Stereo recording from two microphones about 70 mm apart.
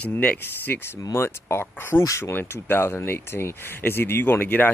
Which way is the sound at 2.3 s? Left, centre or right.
Left.